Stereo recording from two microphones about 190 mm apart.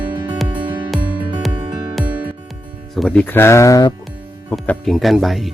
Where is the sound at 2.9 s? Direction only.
5° left (ahead or behind); by 3.9 s 20° left (ahead or behind).